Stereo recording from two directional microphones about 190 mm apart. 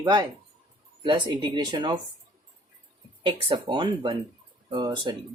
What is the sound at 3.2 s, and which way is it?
Speech, 25° right (ahead or behind).